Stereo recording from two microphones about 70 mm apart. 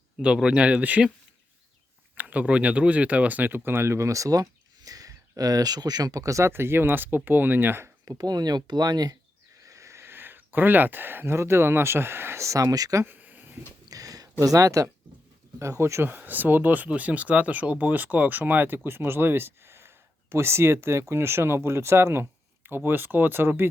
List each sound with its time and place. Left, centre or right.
0.3 s speech: centre
2.1 s speech: centre; by 6.5 s right
6.5 s speech: right
8.0 s speech: right
9.6 s speech: right
13.1 s a sound: right
13.8 s a sound: right
15.5 s speech: right
16.1 s speech: right